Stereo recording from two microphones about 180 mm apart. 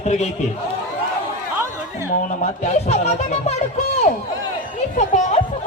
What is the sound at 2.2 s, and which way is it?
A man's voice, 40° left (ahead or behind).